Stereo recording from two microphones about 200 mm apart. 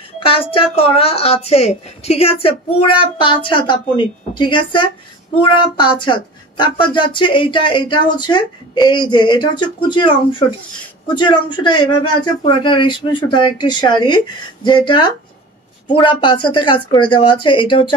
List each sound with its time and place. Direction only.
0.2 s speech: 25° left (ahead or behind)
11.1 s speech: 25° left (ahead or behind)